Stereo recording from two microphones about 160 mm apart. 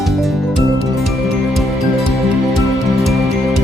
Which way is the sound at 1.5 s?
Centre (ahead or behind).